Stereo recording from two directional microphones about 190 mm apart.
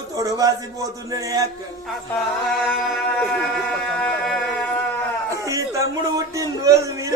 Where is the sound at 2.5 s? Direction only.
Centre (ahead or behind).